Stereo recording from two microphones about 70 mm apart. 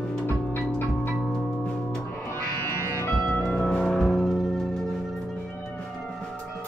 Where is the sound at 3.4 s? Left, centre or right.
Centre.